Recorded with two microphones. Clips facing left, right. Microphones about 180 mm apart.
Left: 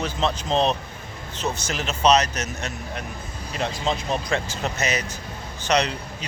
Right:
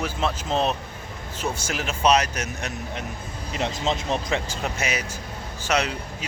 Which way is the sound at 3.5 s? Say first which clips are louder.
Even; 20° right (ahead or behind).